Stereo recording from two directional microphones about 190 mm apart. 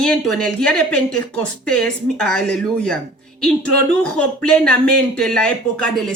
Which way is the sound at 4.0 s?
5° left (ahead or behind).